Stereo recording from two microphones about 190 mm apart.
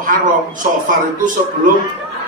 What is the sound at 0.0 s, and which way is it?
Speech, 45° right (ahead or behind).